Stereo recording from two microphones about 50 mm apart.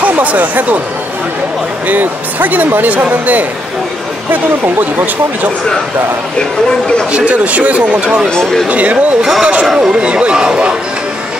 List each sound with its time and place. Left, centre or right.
0.0 s speech: right
1.9 s speech: right
7.1 s speech: right
8.3 s speech: centre
8.6 s speech: right
9.2 s speech: centre
9.9 s speech: right